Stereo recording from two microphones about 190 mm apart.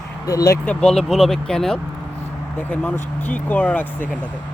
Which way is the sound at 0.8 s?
Centre (ahead or behind).